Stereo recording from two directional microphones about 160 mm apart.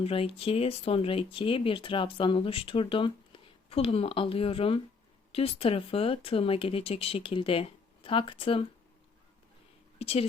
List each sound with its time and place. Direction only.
0.0 s speech: 35° left (ahead or behind)
10.0 s speech: 40° left (ahead or behind)